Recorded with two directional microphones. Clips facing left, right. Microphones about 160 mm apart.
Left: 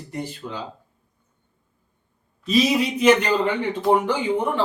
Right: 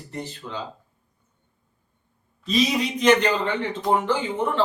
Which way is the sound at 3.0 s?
10° left (ahead or behind).